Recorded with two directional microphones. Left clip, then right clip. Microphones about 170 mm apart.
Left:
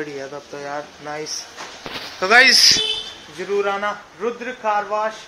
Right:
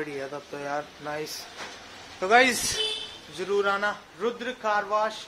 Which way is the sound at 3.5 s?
10° right (ahead or behind).